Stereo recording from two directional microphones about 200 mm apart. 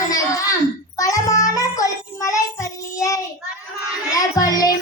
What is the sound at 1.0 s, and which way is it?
Music, 15° left (ahead or behind).